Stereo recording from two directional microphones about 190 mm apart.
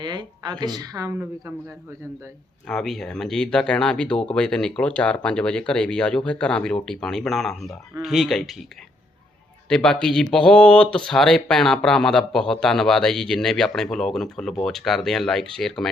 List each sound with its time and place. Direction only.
0.0 s speech: 25° right (ahead or behind)
2.6 s speech: centre (ahead or behind)
9.6 s speech: 5° left (ahead or behind)